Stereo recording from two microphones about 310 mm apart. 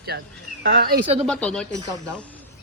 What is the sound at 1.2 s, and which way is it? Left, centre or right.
Speech, centre.